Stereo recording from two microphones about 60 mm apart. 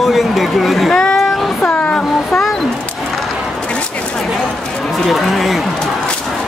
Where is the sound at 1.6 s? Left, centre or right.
Left.